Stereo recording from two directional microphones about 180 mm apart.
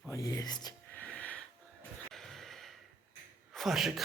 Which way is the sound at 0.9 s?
10° left (ahead or behind).